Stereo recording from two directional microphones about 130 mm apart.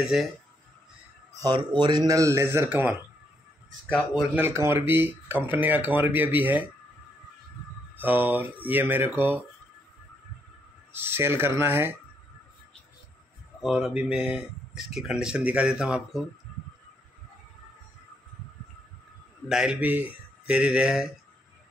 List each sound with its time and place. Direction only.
0.0 s speech: centre (ahead or behind)
1.3 s a man's voice: 30° right (ahead or behind); by 3.0 s 10° right (ahead or behind)
3.9 s speech: centre (ahead or behind)
4.4 s speech: 20° right (ahead or behind)
8.0 s speech: 15° right (ahead or behind)
10.9 s speech: 15° right (ahead or behind)
13.6 s speech: centre (ahead or behind)
19.5 s speech: 5° right (ahead or behind)